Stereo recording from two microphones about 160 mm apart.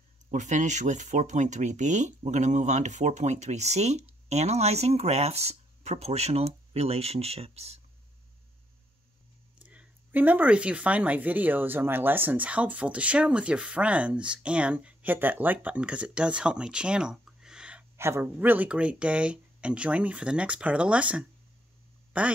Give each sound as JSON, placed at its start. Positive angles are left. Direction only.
{"t": 0.3, "sound": "speech", "side_deg": -50}
{"t": 9.7, "sound": "speech", "side_deg": -10}